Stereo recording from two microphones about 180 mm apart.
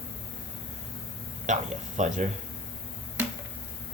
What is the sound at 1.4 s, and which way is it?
Speech, 45° right (ahead or behind).